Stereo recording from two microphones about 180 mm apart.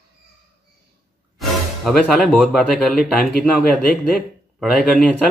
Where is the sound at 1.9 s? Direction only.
5° left (ahead or behind).